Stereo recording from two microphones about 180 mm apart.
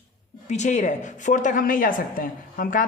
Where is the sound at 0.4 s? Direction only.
40° left (ahead or behind).